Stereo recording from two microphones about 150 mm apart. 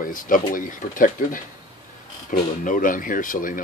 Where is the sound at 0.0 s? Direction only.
65° left (ahead or behind).